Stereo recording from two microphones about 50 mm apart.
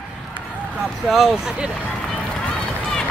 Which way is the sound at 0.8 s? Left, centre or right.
Centre.